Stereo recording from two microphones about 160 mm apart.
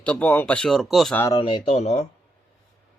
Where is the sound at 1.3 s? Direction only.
35° left (ahead or behind).